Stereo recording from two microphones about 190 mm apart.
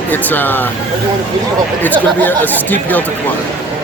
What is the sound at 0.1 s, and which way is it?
Speech, 10° left (ahead or behind).